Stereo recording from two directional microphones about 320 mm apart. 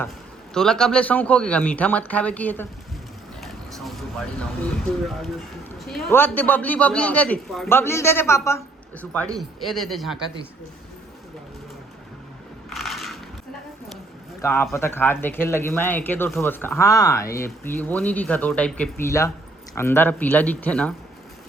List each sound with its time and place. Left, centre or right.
0.5 s a man's voice: centre
12.7 s crushing: centre
14.4 s a man's voice: centre